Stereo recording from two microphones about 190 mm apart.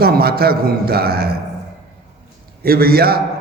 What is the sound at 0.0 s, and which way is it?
A man's voice, 55° right (ahead or behind).